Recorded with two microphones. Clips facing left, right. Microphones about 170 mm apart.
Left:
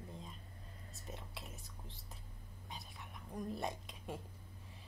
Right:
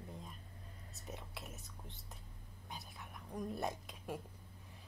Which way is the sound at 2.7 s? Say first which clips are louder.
Right 1 dB; centre (ahead or behind).